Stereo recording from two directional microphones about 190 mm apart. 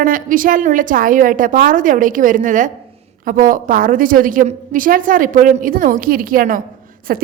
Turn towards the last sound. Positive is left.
turn(degrees=-50)  # may be behind; listen again after turning